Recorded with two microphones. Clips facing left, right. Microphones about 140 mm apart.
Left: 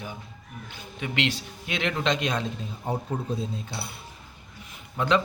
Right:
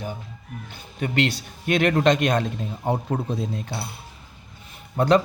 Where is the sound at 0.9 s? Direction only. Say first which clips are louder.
Right 5 dB; 45° right (ahead or behind); by 3.8 s 65° right (ahead or behind).